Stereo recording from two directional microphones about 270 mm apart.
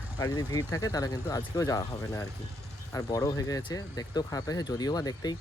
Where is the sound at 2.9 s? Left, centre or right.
Centre.